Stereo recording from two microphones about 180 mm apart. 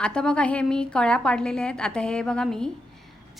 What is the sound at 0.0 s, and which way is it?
A woman's voice, 5° left (ahead or behind).